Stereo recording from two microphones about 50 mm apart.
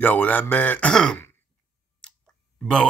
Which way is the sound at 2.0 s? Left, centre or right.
Centre.